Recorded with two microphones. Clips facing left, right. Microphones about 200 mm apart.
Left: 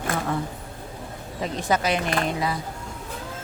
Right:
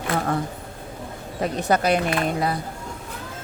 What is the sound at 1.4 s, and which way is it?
Speech, 60° right (ahead or behind).